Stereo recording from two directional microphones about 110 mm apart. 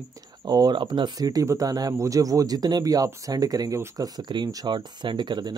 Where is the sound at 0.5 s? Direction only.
40° right (ahead or behind).